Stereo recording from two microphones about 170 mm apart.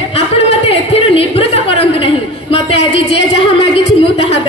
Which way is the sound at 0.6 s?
35° left (ahead or behind).